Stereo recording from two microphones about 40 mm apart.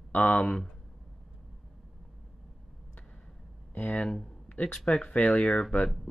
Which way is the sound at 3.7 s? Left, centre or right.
Left.